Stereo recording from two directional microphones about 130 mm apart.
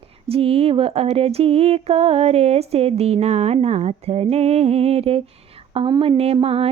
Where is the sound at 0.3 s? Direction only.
50° right (ahead or behind).